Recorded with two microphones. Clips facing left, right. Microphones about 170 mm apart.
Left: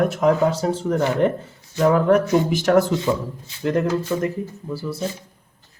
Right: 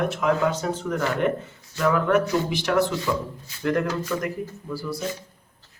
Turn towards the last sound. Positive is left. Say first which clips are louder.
# left 2 dB
turn(degrees=25)  # may be behind; listen again after turning